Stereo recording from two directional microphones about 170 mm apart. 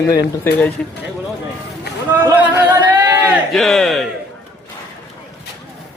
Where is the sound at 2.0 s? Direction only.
10° right (ahead or behind).